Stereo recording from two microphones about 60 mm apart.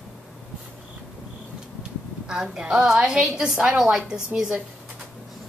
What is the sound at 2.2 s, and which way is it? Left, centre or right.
A woman's voice, centre.